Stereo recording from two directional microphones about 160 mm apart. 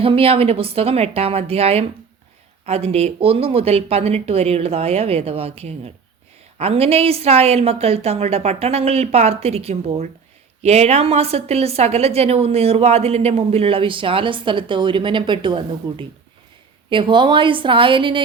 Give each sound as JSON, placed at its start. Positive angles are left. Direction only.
{"t": 0.0, "sound": "a woman's voice", "side_deg": -35}